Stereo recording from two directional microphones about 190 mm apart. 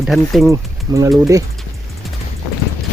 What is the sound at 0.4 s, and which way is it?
Speech, 15° right (ahead or behind).